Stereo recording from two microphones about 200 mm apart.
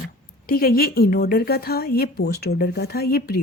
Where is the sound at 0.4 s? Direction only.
45° left (ahead or behind).